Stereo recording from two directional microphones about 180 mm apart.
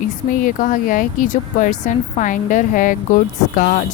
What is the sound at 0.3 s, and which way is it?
Speech, 45° left (ahead or behind).